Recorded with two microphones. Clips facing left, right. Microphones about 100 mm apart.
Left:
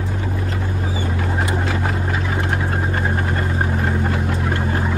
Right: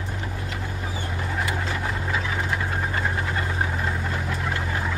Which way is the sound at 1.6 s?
75° left (ahead or behind).